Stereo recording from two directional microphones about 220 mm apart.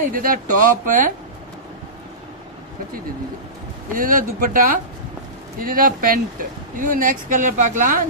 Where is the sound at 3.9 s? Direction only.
40° right (ahead or behind).